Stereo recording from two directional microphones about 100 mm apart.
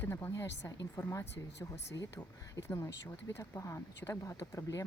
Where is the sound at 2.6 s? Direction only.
25° left (ahead or behind).